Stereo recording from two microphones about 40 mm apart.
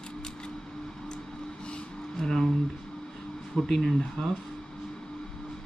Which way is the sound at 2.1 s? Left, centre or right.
Centre.